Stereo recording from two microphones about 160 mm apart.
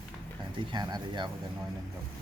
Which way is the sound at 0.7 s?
25° right (ahead or behind).